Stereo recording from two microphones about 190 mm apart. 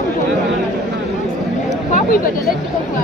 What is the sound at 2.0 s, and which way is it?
Speech, 45° left (ahead or behind).